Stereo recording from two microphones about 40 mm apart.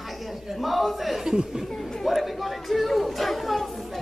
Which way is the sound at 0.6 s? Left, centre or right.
Centre.